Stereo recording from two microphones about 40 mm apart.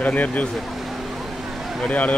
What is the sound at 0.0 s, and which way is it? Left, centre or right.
Speech, left.